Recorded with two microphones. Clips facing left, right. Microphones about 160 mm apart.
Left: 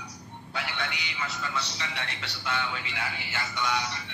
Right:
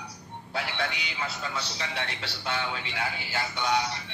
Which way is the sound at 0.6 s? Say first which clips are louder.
Right 3 dB; 35° right (ahead or behind).